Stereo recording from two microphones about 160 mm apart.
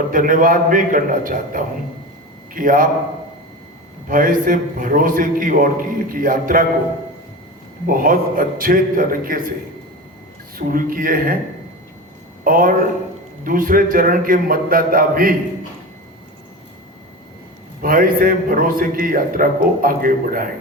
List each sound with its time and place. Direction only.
0.1 s a man's voice: 60° right (ahead or behind)
4.1 s a man's voice: 60° right (ahead or behind)
7.9 s a man's voice: 60° right (ahead or behind)
10.6 s a man's voice: 60° right (ahead or behind)
12.5 s a man's voice: 60° right (ahead or behind)
17.8 s a man's voice: 65° right (ahead or behind)